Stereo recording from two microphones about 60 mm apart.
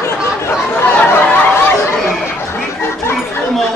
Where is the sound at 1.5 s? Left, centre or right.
Left.